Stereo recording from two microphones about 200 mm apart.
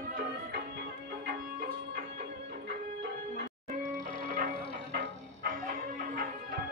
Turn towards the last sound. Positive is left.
turn(degrees=-45)  # may be behind; listen again after turning